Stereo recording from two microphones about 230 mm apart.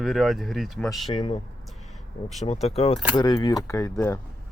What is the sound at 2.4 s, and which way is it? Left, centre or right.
Speech, left.